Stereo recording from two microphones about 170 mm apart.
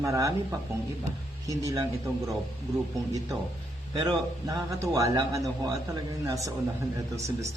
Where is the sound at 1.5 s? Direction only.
20° right (ahead or behind).